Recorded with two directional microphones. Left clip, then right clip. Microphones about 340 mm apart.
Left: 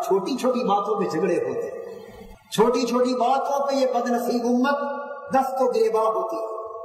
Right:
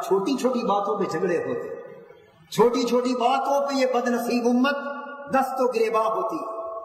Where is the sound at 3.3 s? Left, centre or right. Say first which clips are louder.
Even; centre.